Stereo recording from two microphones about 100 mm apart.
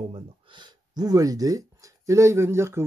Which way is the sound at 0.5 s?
45° right (ahead or behind).